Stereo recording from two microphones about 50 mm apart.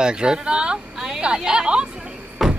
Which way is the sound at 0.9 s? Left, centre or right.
Centre.